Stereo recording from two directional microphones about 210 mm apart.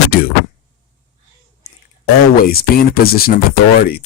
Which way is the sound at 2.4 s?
45° left (ahead or behind).